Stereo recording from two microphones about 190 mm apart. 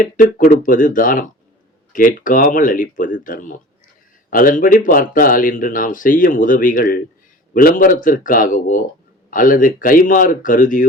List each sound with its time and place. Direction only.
0.0 s speech: 45° left (ahead or behind)